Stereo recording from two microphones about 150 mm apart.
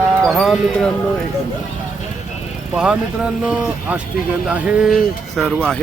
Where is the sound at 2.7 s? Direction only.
5° right (ahead or behind).